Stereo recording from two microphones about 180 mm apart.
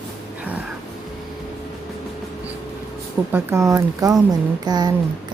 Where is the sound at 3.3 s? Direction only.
15° right (ahead or behind).